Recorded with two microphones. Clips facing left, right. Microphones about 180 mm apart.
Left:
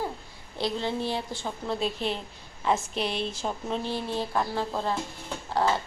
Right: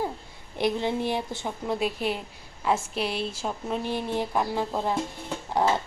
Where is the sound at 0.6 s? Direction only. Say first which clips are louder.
Right 3 dB; 15° right (ahead or behind).